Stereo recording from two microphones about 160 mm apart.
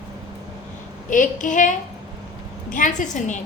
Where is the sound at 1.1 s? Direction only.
55° left (ahead or behind).